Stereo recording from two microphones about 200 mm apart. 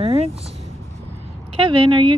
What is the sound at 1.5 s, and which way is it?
Speech, 25° right (ahead or behind).